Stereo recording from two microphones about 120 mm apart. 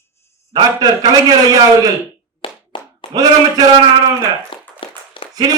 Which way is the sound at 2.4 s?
45° left (ahead or behind).